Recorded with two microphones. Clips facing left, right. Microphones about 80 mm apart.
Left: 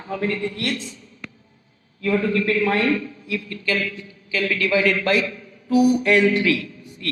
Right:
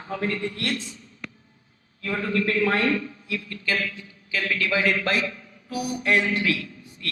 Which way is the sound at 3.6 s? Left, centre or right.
Left.